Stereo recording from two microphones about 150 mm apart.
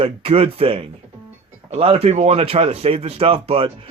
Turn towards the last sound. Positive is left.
turn(degrees=-40)  # may be behind; listen again after turning